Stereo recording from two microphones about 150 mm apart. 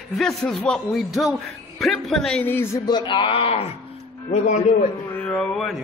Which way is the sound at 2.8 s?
30° left (ahead or behind).